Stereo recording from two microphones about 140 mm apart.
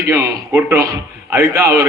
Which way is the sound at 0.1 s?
20° right (ahead or behind).